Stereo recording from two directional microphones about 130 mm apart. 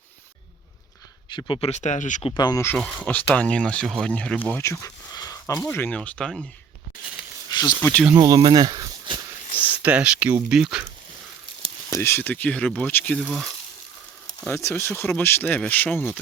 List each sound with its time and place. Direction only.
1.7 s speech: 65° left (ahead or behind)
2.3 s speech: 25° left (ahead or behind)
2.7 s speech: 5° left (ahead or behind); by 5.6 s 25° left (ahead or behind)
5.6 s speech: 15° left (ahead or behind)
7.5 s a sound: 35° left (ahead or behind)
7.8 s speech: 15° left (ahead or behind)
8.1 s speech: 30° right (ahead or behind)
9.8 s speech: 10° right (ahead or behind)
11.9 s speech: 20° left (ahead or behind)
13.2 s speech: 5° right (ahead or behind)
14.4 s speech: 20° left (ahead or behind)